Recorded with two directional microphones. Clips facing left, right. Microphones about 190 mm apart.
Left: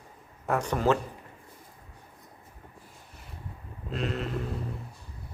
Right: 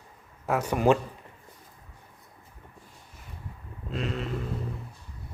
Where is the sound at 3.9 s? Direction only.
Centre (ahead or behind).